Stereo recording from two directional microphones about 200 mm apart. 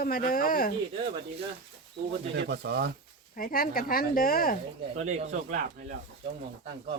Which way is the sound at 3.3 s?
45° left (ahead or behind).